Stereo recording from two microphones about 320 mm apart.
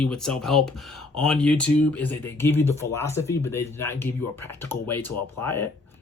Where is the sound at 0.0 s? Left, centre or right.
Centre.